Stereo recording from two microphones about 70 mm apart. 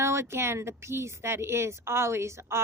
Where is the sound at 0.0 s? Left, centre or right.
Right.